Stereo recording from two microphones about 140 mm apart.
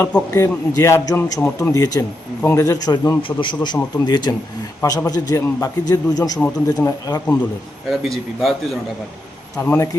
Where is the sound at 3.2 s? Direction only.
35° left (ahead or behind).